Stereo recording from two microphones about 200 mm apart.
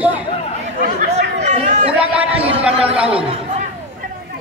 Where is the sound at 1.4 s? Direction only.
35° right (ahead or behind).